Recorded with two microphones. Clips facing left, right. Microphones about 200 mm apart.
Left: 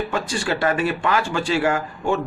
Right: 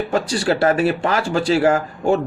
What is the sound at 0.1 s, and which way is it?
Speech, 35° right (ahead or behind).